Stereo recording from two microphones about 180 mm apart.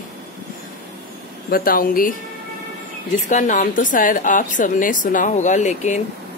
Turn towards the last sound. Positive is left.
turn(degrees=40)  # may be behind; listen again after turning